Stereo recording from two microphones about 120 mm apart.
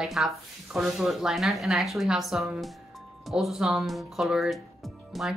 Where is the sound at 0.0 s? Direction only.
Centre (ahead or behind).